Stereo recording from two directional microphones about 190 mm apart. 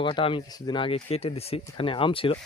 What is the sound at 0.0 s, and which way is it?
Speech, 25° left (ahead or behind).